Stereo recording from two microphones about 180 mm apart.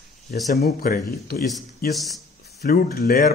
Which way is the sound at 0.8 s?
55° left (ahead or behind).